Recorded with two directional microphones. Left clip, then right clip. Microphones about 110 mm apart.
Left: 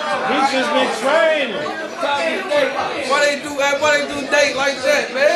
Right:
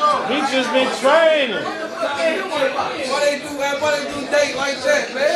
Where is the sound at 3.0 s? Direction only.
15° left (ahead or behind).